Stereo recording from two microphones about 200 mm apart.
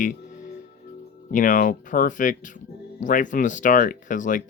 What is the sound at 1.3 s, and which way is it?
Speech, 40° left (ahead or behind).